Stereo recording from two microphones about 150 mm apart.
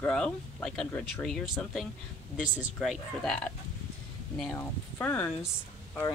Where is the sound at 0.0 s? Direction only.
5° left (ahead or behind).